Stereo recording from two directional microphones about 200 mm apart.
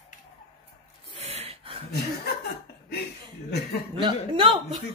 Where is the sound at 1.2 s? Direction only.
30° right (ahead or behind).